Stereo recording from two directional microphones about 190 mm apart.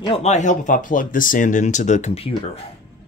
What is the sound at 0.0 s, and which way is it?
Speech, 30° left (ahead or behind).